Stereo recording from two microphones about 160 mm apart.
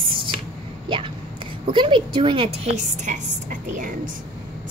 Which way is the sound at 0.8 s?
35° right (ahead or behind).